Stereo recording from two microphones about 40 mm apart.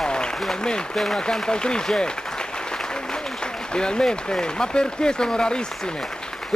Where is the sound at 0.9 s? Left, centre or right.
Centre.